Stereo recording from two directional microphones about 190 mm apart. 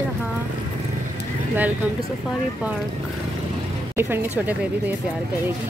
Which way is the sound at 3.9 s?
10° right (ahead or behind).